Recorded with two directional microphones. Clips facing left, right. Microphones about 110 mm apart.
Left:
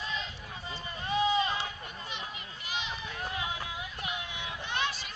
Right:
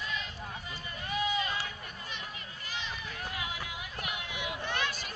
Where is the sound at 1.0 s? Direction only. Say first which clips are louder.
Left 5 dB; 30° left (ahead or behind).